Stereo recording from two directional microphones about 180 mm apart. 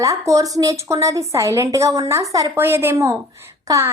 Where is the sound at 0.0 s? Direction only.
20° right (ahead or behind).